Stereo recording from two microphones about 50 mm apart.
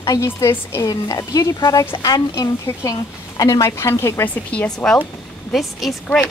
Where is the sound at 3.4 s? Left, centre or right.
Left.